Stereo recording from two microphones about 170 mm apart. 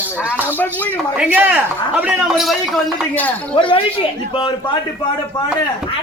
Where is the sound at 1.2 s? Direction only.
10° right (ahead or behind).